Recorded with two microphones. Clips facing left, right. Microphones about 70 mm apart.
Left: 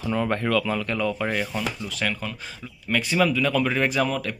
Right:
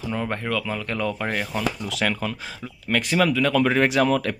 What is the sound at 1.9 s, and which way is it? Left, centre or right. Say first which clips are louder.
Speech: right 3 dB; right.